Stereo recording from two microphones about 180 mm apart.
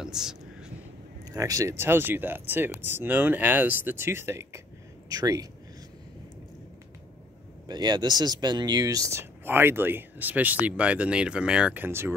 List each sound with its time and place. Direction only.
0.0 s a sound: 5° right (ahead or behind)
1.3 s speech: 20° right (ahead or behind)
7.6 s speech: 25° right (ahead or behind)